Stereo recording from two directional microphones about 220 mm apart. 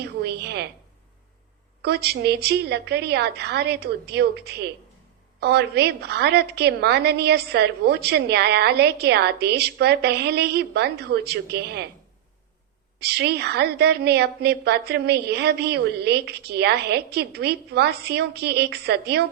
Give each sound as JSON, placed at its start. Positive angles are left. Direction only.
{"t": 0.0, "sound": "a woman's voice", "side_deg": -50}
{"t": 1.8, "sound": "a woman's voice", "side_deg": -45}
{"t": 13.0, "sound": "a woman's voice", "side_deg": -50}